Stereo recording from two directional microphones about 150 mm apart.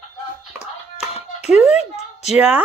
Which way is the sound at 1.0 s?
45° left (ahead or behind).